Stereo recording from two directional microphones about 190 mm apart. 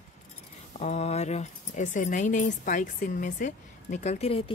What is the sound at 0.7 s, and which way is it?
Speech, 35° left (ahead or behind).